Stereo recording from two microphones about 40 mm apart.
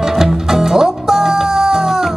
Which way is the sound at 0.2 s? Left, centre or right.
Centre.